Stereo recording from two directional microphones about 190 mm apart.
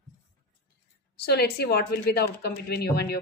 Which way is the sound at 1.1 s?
55° left (ahead or behind).